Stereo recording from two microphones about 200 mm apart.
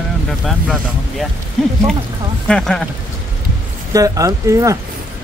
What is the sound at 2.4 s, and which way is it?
Speech, 5° left (ahead or behind).